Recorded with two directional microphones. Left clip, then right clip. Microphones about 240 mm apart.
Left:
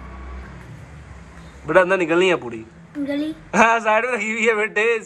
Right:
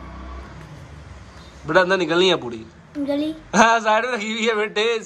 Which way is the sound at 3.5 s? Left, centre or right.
Centre.